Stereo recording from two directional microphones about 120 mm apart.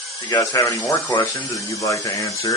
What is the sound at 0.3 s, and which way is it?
Speech, 25° left (ahead or behind).